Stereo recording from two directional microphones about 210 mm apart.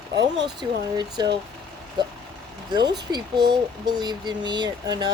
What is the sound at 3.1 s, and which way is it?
Speech, 20° right (ahead or behind).